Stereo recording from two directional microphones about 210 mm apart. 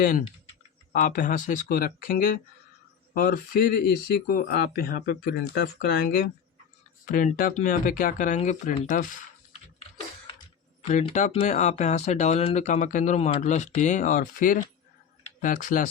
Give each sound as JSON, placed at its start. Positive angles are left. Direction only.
{"t": 0.0, "sound": "speech", "side_deg": 45}
{"t": 10.8, "sound": "speech", "side_deg": 30}